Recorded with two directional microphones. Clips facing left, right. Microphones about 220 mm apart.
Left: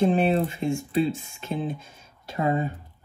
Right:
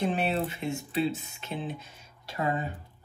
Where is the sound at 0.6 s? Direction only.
40° left (ahead or behind).